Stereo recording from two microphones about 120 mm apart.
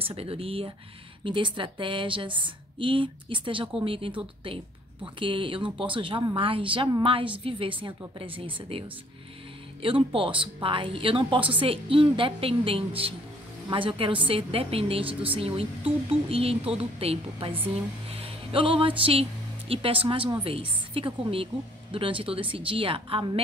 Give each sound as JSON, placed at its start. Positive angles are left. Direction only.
{"t": 0.0, "sound": "a woman's voice", "side_deg": -50}